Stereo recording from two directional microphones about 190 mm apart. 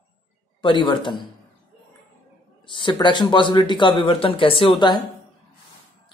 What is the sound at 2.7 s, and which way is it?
A man's voice, 25° left (ahead or behind).